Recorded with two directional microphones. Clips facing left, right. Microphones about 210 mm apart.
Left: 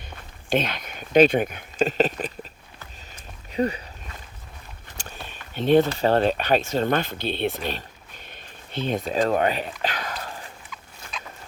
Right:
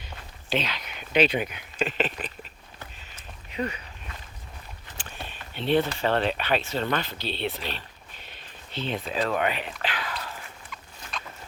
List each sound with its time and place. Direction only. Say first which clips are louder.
0.5 s speech: left 5 dB; 50° left (ahead or behind)
3.5 s speech: left 7 dB; 35° left (ahead or behind)
4.9 s speech: left 1 dB; 45° left (ahead or behind)